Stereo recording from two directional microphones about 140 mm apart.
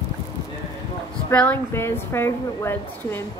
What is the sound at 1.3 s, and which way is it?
Speech, 10° left (ahead or behind).